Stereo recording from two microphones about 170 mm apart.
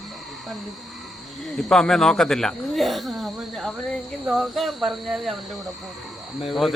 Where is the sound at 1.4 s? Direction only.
Centre (ahead or behind).